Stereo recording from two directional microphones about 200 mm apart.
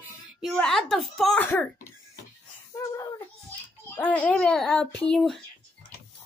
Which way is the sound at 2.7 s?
20° left (ahead or behind).